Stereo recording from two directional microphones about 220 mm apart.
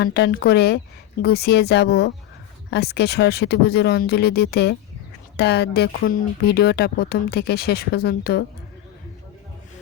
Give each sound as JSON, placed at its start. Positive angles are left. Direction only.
{"t": 0.0, "sound": "speech", "side_deg": 45}